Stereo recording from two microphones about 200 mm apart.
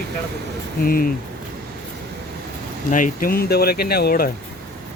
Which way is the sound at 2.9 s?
40° left (ahead or behind).